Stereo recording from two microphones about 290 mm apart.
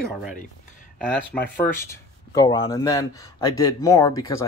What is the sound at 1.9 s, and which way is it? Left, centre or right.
Speech, centre.